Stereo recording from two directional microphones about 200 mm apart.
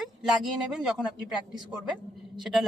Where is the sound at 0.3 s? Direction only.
Centre (ahead or behind).